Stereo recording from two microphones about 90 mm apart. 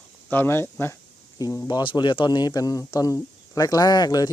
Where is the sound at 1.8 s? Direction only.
65° left (ahead or behind).